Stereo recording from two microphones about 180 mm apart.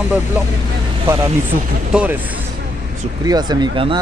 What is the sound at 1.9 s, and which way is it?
Speech, 10° right (ahead or behind).